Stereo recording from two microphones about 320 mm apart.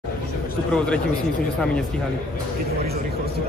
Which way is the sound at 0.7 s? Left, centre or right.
Centre.